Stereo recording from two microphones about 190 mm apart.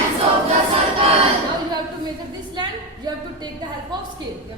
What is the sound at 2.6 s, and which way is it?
A woman's voice, 20° right (ahead or behind).